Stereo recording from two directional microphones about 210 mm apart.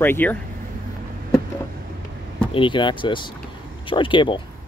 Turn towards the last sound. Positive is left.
turn(degrees=25)  # may be behind; listen again after turning